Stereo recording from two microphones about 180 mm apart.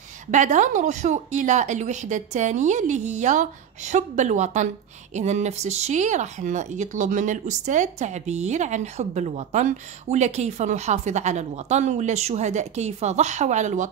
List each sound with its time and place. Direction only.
0.3 s speech: 45° right (ahead or behind)